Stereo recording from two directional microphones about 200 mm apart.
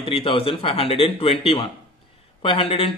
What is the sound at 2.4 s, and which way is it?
Speech, 30° left (ahead or behind).